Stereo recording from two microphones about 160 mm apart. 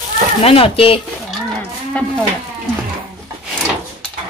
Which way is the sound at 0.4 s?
35° left (ahead or behind).